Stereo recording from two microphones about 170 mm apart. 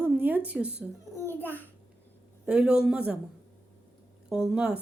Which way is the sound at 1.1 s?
10° left (ahead or behind).